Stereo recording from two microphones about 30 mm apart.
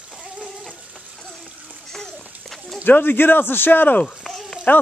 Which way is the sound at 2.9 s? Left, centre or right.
Left.